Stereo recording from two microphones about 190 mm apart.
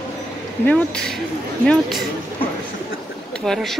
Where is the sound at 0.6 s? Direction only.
5° left (ahead or behind).